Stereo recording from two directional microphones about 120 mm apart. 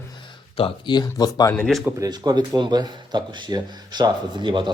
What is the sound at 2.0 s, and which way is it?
A man's voice, 35° right (ahead or behind).